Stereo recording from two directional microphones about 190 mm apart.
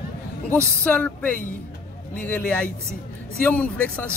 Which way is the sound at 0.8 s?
5° left (ahead or behind).